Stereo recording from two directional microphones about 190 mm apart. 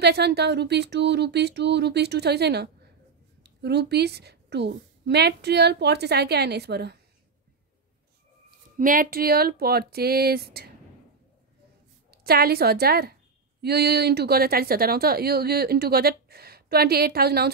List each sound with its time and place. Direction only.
0.0 s a woman's voice: 60° right (ahead or behind)
8.5 s a woman's voice: 45° right (ahead or behind)
12.1 s a woman's voice: 55° right (ahead or behind)